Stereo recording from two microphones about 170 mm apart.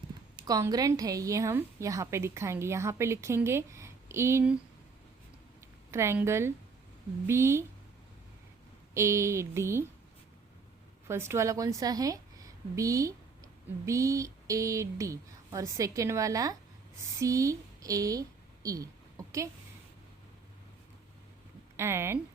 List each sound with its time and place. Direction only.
0.4 s a woman's voice: 20° right (ahead or behind)
5.5 s a sound: 15° right (ahead or behind)
7.3 s a woman's voice: 15° right (ahead or behind)
9.0 s a woman's voice: 15° right (ahead or behind)
11.1 s a woman's voice: 15° right (ahead or behind)
21.8 s a woman's voice: 15° right (ahead or behind)